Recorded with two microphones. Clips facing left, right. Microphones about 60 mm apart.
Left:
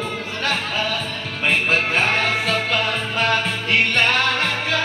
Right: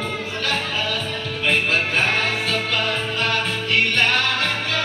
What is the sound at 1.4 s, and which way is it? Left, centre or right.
Music, left.